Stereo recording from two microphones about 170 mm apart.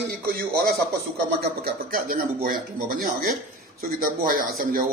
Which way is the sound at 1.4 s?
60° right (ahead or behind).